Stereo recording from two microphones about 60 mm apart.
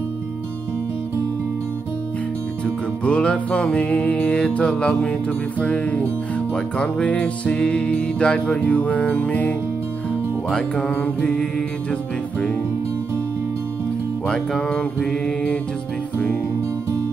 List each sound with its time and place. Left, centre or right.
3.1 s music: centre
8.5 s music: left
11.1 s music: centre
14.2 s music: centre